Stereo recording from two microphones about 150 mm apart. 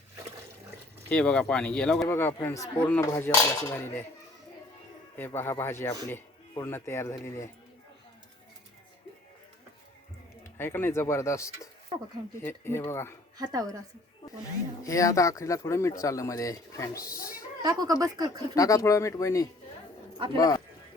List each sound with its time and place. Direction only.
1.1 s speech: 5° left (ahead or behind)
5.1 s speech: 15° left (ahead or behind)
10.4 s speech: 15° left (ahead or behind)
13.3 s speech: 25° right (ahead or behind)
14.8 s speech: 20° left (ahead or behind)
17.0 s speech: 75° left (ahead or behind)
17.6 s speech: 25° right (ahead or behind)
18.5 s speech: 20° left (ahead or behind)